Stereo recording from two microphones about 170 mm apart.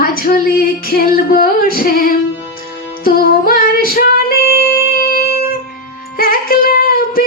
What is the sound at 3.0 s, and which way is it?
Female singing, 60° left (ahead or behind).